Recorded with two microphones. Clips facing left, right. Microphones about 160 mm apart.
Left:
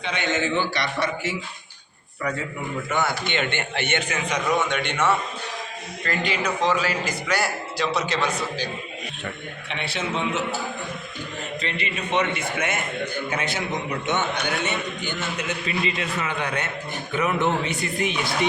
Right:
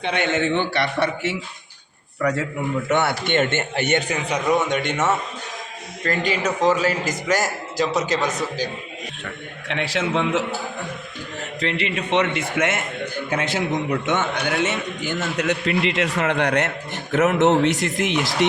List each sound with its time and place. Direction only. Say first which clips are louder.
0.0 s a man's voice: right 4 dB; 55° right (ahead or behind)
2.2 s a man's voice: right 6 dB; 85° right
2.9 s a man's voice: right 5 dB; 65° right (ahead or behind); by 8.6 s 40° right (ahead or behind)
9.6 s a man's voice: right 6 dB; 90° right
11.6 s a man's voice: right 8 dB; 85° right